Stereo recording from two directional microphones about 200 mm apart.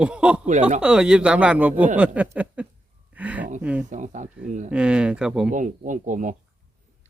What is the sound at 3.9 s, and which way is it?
Speech, 40° right (ahead or behind).